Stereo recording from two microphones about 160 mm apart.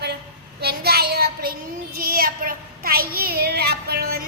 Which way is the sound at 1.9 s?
70° right (ahead or behind).